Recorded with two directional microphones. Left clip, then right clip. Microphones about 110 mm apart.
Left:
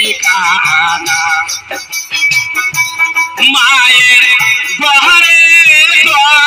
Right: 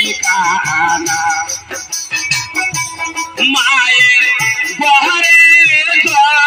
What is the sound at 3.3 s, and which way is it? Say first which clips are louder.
Music: left 3 dB; 35° right (ahead or behind).